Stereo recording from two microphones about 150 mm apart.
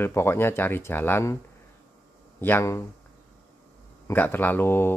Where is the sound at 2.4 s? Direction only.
15° left (ahead or behind).